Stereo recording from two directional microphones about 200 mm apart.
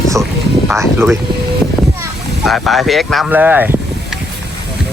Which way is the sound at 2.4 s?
Centre (ahead or behind).